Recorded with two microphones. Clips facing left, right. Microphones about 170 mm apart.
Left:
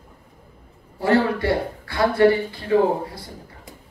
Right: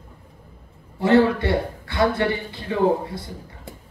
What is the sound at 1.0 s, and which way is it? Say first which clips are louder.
A man's voice: right 2 dB; 25° right (ahead or behind).